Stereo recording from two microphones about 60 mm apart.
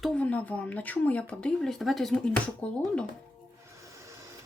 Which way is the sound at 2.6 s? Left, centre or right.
Left.